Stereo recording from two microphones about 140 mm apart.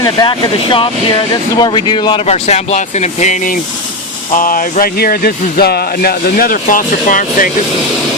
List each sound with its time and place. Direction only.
0.0 s speech: 30° left (ahead or behind)
2.2 s speech: 50° left (ahead or behind)
4.3 s speech: 75° left (ahead or behind)